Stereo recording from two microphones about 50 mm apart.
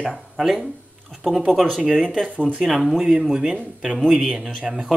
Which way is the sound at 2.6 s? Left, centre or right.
Centre.